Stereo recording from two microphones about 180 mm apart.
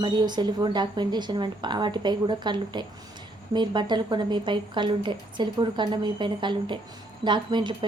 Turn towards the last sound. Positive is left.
turn(degrees=-25)  # may be behind; listen again after turning